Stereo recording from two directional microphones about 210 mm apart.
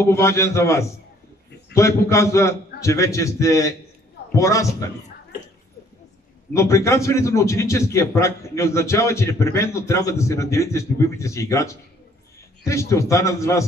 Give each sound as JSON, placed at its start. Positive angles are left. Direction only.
{"t": 0.0, "sound": "a man's voice", "side_deg": 15}
{"t": 6.5, "sound": "a man's voice", "side_deg": 15}